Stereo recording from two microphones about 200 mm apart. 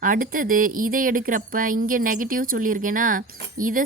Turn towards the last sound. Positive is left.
turn(degrees=-45)  # may be behind; listen again after turning